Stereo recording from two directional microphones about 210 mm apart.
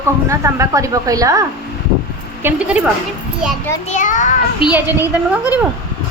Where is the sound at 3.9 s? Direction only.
35° left (ahead or behind).